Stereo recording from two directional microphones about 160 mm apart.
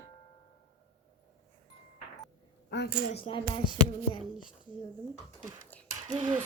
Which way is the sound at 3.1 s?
35° left (ahead or behind).